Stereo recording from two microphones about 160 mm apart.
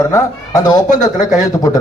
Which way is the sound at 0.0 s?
20° left (ahead or behind).